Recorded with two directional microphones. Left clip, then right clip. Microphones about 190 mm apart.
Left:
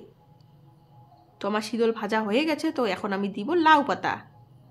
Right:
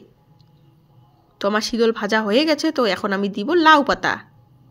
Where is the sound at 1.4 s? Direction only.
25° right (ahead or behind).